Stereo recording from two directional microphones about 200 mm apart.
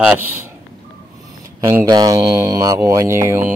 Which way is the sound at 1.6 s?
15° right (ahead or behind).